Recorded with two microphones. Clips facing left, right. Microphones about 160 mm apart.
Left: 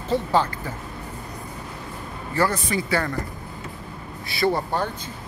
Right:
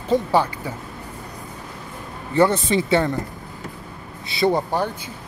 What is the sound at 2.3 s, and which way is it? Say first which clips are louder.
Speech: right 6 dB; 25° right (ahead or behind).